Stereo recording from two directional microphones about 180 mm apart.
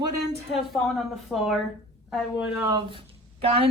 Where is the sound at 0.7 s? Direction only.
Centre (ahead or behind).